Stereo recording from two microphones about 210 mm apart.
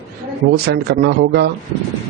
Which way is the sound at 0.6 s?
50° right (ahead or behind).